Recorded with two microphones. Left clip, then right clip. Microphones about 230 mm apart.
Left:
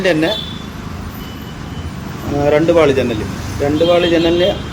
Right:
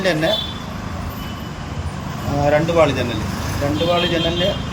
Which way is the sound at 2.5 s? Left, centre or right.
Centre.